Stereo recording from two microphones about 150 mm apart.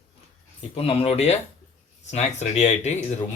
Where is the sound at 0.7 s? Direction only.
40° left (ahead or behind).